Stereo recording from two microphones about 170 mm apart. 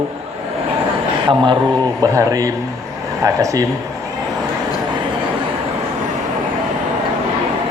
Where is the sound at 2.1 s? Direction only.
20° right (ahead or behind).